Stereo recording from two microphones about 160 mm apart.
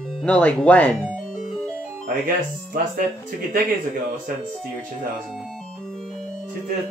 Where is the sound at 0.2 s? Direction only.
5° left (ahead or behind).